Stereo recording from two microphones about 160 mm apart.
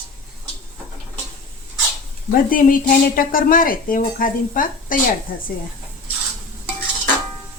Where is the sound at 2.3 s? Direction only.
60° left (ahead or behind).